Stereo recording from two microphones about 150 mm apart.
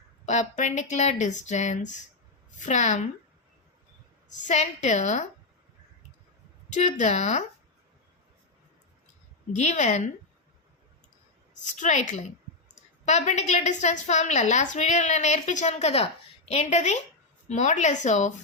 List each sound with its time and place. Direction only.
0.3 s a woman's voice: 50° left (ahead or behind)
4.3 s a woman's voice: 50° left (ahead or behind)
6.7 s speech: 55° left (ahead or behind)
9.6 s a woman's voice: 50° left (ahead or behind)
11.6 s a woman's voice: 55° left (ahead or behind)